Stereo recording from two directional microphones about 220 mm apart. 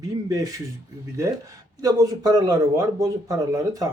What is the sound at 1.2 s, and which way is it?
A man's voice, 10° right (ahead or behind).